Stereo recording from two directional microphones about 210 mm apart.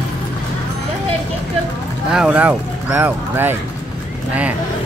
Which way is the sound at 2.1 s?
5° right (ahead or behind).